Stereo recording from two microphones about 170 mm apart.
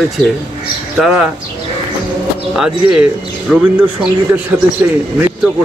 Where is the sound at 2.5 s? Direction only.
5° right (ahead or behind).